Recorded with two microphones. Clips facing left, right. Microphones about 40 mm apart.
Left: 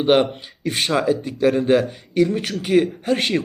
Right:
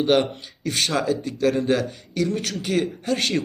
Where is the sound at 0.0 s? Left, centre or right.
Left.